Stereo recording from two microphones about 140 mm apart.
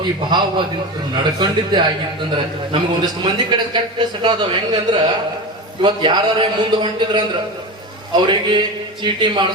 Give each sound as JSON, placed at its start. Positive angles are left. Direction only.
{"t": 0.0, "sound": "a man's voice", "side_deg": -30}